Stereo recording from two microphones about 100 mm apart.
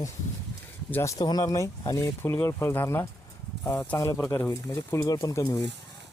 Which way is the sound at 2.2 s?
20° left (ahead or behind).